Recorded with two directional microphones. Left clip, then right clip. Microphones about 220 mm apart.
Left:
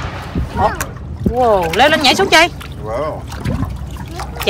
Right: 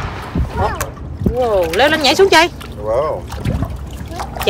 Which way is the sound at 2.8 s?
25° right (ahead or behind).